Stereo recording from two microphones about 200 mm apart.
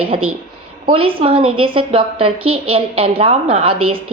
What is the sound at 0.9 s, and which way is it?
A woman's voice, 30° right (ahead or behind).